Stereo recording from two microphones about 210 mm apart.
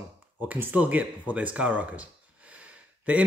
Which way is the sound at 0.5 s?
10° right (ahead or behind).